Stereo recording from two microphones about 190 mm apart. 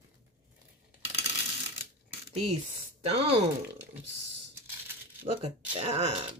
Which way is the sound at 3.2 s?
30° right (ahead or behind).